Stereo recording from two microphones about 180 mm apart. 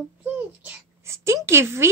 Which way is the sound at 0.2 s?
10° right (ahead or behind).